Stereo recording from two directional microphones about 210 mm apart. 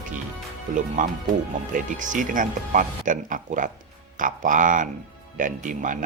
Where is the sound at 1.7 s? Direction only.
40° right (ahead or behind).